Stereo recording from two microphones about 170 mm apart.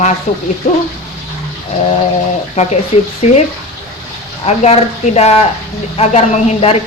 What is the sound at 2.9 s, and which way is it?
Speech, 40° left (ahead or behind).